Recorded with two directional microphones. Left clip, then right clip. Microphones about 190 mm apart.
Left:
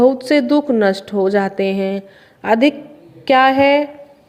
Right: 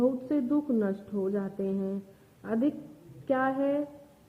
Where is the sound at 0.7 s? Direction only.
45° left (ahead or behind).